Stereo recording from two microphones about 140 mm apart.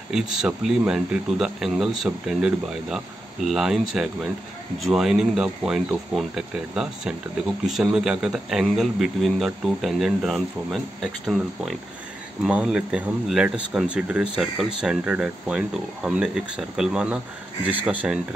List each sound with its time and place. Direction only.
0.1 s speech: 5° right (ahead or behind)